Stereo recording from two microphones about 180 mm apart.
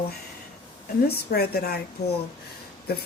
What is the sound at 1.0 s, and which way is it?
Speech, 60° left (ahead or behind).